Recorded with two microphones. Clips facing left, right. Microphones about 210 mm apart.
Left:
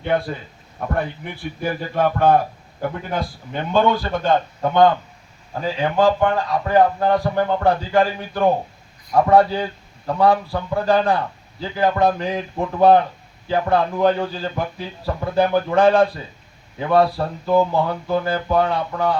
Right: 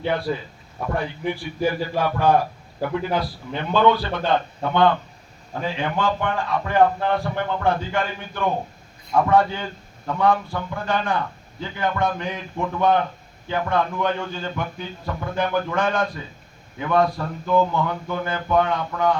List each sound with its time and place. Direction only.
0.9 s a man's voice: 55° left (ahead or behind); by 19.2 s 35° left (ahead or behind)